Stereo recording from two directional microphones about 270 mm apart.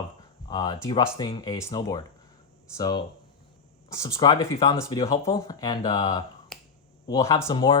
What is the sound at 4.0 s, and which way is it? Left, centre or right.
Speech, centre.